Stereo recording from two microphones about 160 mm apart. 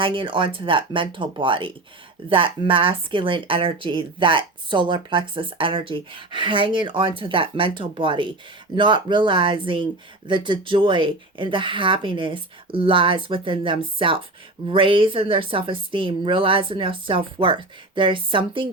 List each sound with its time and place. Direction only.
0.0 s speech: 30° right (ahead or behind)